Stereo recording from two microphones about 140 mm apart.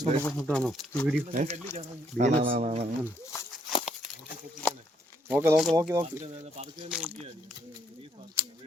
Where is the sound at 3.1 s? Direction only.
20° left (ahead or behind).